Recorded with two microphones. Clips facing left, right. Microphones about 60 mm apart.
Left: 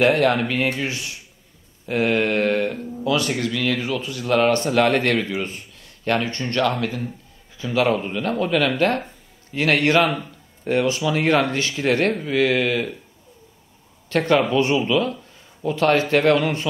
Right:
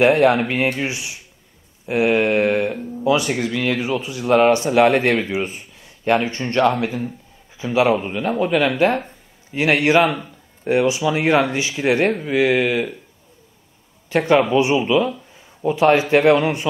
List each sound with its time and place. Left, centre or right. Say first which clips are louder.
0.0 s speech: right 3 dB; centre
14.0 s speech: right 3 dB; centre